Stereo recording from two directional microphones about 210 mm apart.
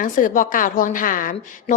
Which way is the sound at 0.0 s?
40° left (ahead or behind).